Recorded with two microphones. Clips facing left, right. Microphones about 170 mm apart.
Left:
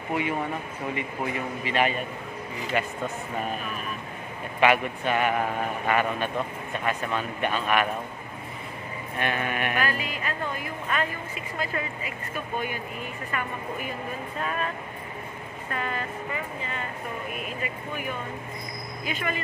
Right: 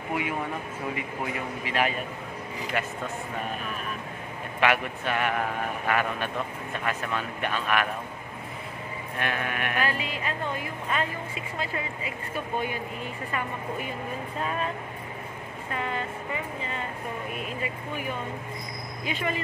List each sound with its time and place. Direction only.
0.9 s speech: 5° right (ahead or behind)
4.6 s speech: centre (ahead or behind)
9.2 s speech: centre (ahead or behind)
9.8 s speech: 25° right (ahead or behind)
15.7 s speech: 20° right (ahead or behind)
19.0 s speech: 30° right (ahead or behind)